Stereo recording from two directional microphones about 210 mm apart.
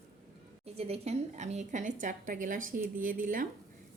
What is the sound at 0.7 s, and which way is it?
A woman's voice, 30° right (ahead or behind).